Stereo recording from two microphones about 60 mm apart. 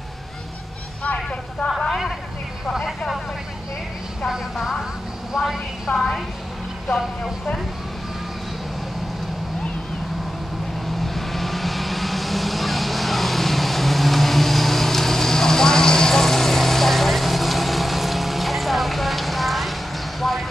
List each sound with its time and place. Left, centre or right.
1.0 s vehicle: centre
5.3 s a woman's voice: centre
5.9 s a woman's voice: centre
6.9 s speech: centre
11.0 s vehicle: centre